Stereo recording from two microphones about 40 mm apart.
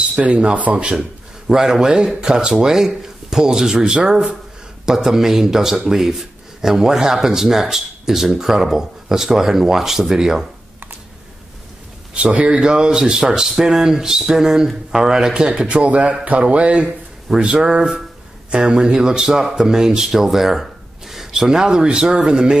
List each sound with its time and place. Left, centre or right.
0.3 s speech: right
12.1 s a man's voice: right
15.7 s speech: right; by 20.1 s centre
20.1 s a sound: centre
21.3 s speech: centre